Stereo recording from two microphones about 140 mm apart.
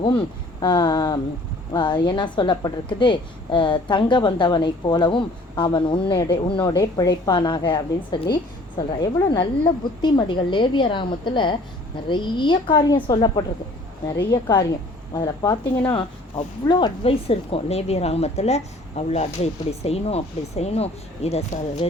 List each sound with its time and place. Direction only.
0.6 s a woman's voice: 30° left (ahead or behind)
16.6 s speech: 35° left (ahead or behind)